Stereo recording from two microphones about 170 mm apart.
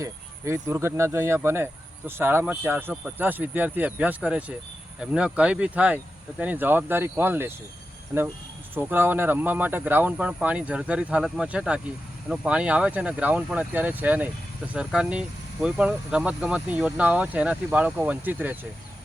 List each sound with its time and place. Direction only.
0.0 s speech: 15° right (ahead or behind)
8.7 s speech: 10° right (ahead or behind)